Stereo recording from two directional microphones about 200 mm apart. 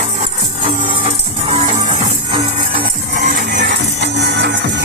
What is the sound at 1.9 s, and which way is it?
Music, 35° right (ahead or behind).